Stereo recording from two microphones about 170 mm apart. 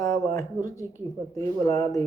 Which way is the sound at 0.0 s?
20° left (ahead or behind).